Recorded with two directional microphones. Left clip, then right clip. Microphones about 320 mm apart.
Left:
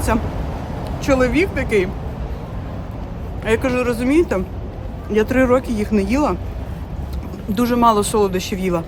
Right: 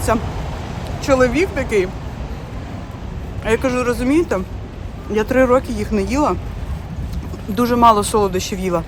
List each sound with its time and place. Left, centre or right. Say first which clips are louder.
0.1 s speech: right 1 dB; centre
3.4 s speech: right 1 dB; centre
7.5 s speech: right 3 dB; centre